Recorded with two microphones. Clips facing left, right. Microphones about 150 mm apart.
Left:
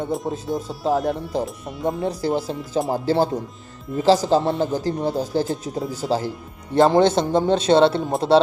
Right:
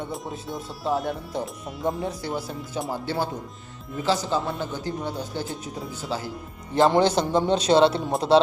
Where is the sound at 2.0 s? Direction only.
35° left (ahead or behind).